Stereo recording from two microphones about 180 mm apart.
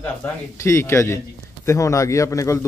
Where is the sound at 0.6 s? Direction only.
15° left (ahead or behind).